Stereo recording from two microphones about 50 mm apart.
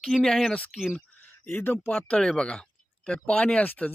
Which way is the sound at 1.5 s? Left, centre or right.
Left.